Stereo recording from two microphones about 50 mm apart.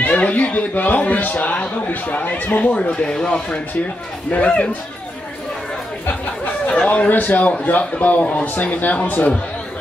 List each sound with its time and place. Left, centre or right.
0.0 s a man's voice: left
1.5 s speech: left
6.0 s a sound: left
6.9 s a man's voice: left